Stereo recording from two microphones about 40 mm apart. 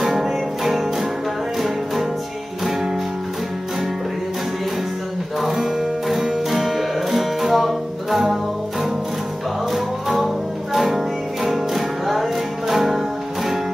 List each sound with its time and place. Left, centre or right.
0.0 s music: centre
5.5 s music: centre
9.7 s music: centre